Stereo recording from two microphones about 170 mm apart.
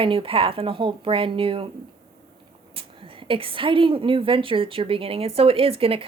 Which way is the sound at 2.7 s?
30° right (ahead or behind).